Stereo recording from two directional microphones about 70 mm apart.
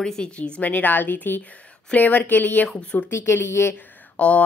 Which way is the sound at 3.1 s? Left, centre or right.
Left.